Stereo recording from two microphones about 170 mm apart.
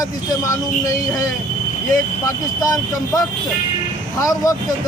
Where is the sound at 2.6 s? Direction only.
20° left (ahead or behind).